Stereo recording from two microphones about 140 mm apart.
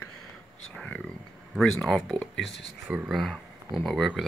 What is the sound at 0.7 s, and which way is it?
Speech, 10° left (ahead or behind).